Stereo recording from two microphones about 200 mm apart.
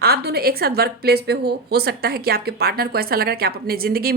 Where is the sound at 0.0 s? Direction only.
50° right (ahead or behind).